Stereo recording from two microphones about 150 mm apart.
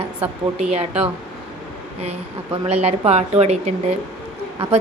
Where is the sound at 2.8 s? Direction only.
45° right (ahead or behind).